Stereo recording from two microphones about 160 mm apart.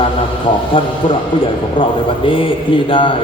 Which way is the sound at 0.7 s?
30° left (ahead or behind).